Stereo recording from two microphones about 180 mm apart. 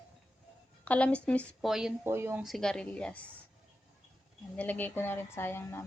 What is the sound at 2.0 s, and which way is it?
Speech, 15° right (ahead or behind).